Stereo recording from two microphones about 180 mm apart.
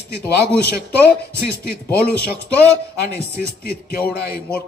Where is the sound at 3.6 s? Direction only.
55° left (ahead or behind).